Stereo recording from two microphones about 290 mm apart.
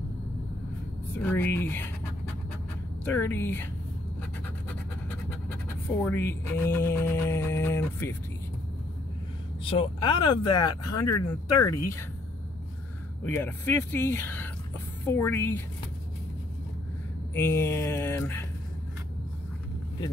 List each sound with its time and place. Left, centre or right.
1.2 s speech: centre
3.1 s speech: centre
5.9 s speech: centre
9.7 s speech: centre
10.6 s speech: left
13.2 s speech: centre
17.3 s speech: centre